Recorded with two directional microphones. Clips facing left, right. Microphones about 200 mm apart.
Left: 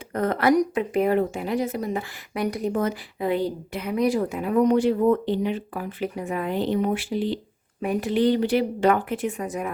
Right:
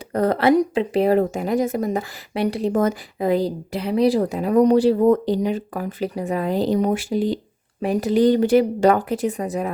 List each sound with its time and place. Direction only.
0.1 s a woman's voice: 35° right (ahead or behind)
2.3 s speech: 30° right (ahead or behind)
2.7 s a woman's voice: 40° right (ahead or behind)